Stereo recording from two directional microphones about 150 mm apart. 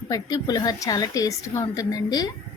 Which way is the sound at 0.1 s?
25° left (ahead or behind).